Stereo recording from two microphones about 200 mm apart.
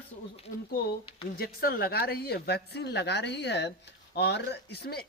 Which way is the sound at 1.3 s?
50° left (ahead or behind).